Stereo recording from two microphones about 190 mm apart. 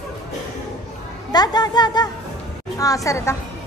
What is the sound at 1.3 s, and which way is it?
A woman's voice, 20° left (ahead or behind).